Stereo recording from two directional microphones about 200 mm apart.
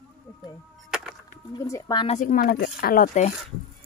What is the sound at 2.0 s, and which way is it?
Speech, 35° left (ahead or behind).